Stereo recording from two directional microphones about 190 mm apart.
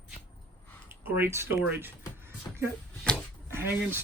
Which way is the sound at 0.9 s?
10° right (ahead or behind).